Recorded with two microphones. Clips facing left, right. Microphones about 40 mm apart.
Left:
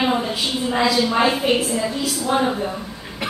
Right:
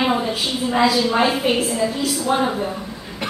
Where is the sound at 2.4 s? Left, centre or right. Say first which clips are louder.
Even; centre.